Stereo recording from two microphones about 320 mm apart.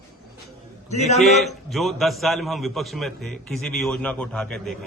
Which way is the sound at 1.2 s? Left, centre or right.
Centre.